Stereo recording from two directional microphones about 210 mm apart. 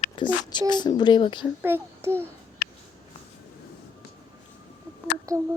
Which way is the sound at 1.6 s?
10° right (ahead or behind).